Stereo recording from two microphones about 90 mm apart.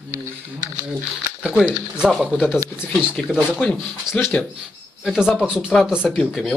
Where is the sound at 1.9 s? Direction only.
10° right (ahead or behind).